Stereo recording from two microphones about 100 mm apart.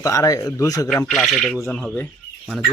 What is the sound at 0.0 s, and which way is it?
Speech, 35° left (ahead or behind).